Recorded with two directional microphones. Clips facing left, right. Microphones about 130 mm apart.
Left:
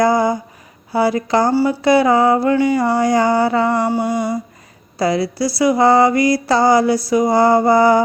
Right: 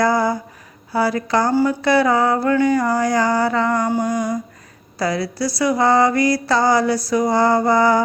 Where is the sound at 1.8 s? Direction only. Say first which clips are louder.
Left 6 dB; 25° left (ahead or behind).